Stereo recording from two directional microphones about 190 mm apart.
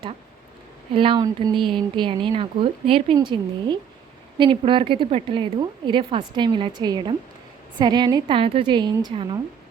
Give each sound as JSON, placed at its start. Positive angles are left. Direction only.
{"t": 0.9, "sound": "a woman's voice", "side_deg": -25}